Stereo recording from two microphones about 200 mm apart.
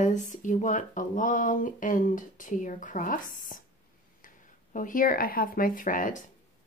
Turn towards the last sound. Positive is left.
turn(degrees=40)  # may be behind; listen again after turning